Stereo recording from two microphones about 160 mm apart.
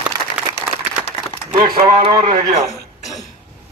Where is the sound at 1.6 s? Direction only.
30° right (ahead or behind).